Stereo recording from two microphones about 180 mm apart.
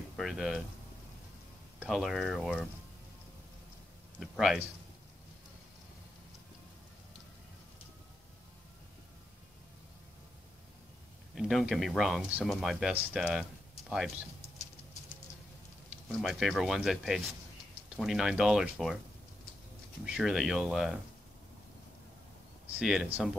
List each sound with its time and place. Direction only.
0.2 s speech: centre (ahead or behind)
1.8 s speech: centre (ahead or behind)
4.2 s speech: centre (ahead or behind)
11.3 s speech: centre (ahead or behind)
16.1 s speech: centre (ahead or behind)
20.1 s speech: centre (ahead or behind)
22.8 s speech: 5° right (ahead or behind)